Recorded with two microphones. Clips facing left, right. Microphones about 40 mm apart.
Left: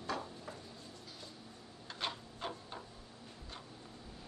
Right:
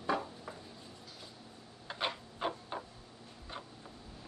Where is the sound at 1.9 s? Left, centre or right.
Centre.